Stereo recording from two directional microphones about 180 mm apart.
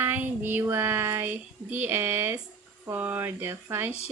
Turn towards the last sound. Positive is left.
turn(degrees=-10)  # may be behind; listen again after turning